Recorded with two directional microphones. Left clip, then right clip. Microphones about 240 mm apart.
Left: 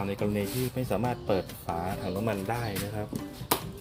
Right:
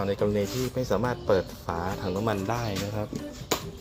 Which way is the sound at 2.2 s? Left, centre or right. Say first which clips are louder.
Right 2 dB; centre.